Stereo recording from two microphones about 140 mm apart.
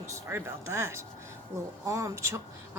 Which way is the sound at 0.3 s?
20° right (ahead or behind).